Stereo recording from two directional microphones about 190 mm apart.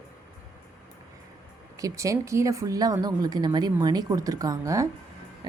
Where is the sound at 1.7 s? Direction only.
15° right (ahead or behind).